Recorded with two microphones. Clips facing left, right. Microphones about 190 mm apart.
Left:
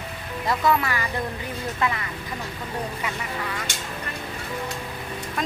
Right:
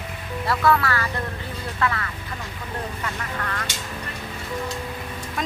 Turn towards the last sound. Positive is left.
turn(degrees=10)  # may be behind; listen again after turning